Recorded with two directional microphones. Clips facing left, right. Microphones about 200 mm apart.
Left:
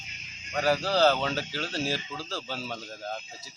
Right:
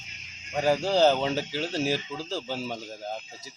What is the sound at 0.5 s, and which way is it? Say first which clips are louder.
Speech: right 2 dB; 20° right (ahead or behind).